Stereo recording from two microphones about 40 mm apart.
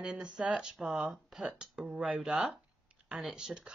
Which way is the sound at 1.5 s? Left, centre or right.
Right.